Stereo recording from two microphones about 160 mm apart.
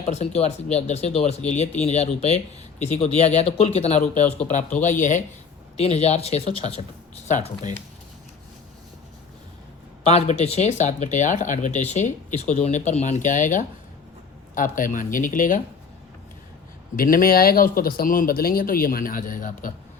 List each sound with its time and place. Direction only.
0.0 s speech: 40° left (ahead or behind)
7.3 s speech: 50° left (ahead or behind)
10.0 s speech: 40° left (ahead or behind); by 15.6 s 55° left (ahead or behind)
17.0 s speech: 65° left (ahead or behind)